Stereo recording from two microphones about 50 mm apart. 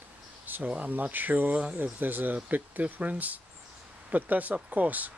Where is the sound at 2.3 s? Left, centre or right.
Right.